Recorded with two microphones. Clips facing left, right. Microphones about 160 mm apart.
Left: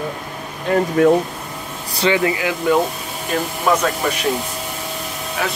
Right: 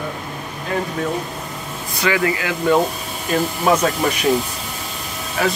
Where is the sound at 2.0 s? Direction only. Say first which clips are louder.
Left 2 dB; 25° left (ahead or behind).